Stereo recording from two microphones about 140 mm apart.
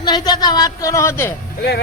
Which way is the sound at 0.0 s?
30° left (ahead or behind).